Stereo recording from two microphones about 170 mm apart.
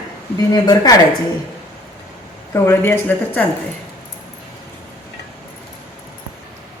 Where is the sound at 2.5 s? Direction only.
15° left (ahead or behind).